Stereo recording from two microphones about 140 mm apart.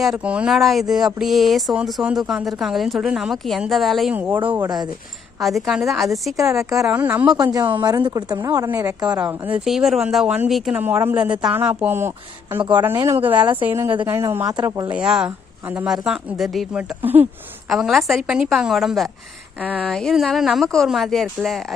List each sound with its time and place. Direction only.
0.0 s speech: 5° right (ahead or behind)
4.1 s speech: 10° right (ahead or behind)
5.4 s speech: centre (ahead or behind)
6.3 s speech: 20° right (ahead or behind)
6.8 s speech: 10° right (ahead or behind)
7.3 s speech: 30° right (ahead or behind)
9.0 s speech: 10° right (ahead or behind); by 14.9 s 30° right (ahead or behind)
14.9 s speech: 5° right (ahead or behind)
17.0 s speech: 15° right (ahead or behind)
17.7 s speech: centre (ahead or behind)